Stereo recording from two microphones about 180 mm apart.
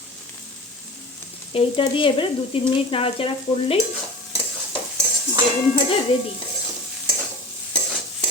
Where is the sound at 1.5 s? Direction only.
30° left (ahead or behind).